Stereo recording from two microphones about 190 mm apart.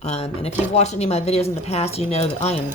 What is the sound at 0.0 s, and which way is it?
Speech, 35° left (ahead or behind).